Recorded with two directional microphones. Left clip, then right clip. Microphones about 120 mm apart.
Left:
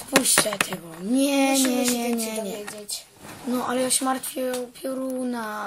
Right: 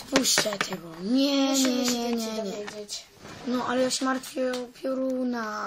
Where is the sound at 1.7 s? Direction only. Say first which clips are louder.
Left 3 dB; 15° left (ahead or behind).